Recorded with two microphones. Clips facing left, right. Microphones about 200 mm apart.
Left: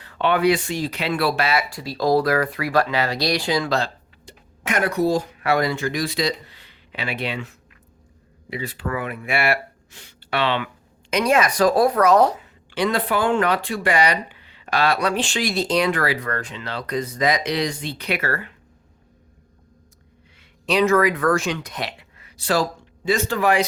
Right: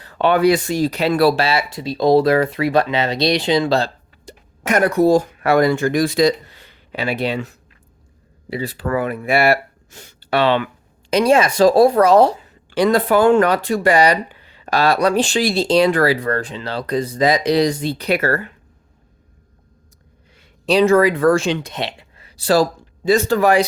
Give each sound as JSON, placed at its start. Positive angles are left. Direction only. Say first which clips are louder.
{"t": 0.0, "sound": "speech", "louder": "right 4 dB", "side_deg": -40}
{"t": 11.1, "sound": "speech", "louder": "right 5 dB", "side_deg": -30}
{"t": 20.7, "sound": "speech", "louder": "right 5 dB", "side_deg": -30}